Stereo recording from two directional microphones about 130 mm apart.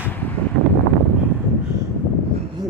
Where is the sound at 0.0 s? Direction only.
15° left (ahead or behind).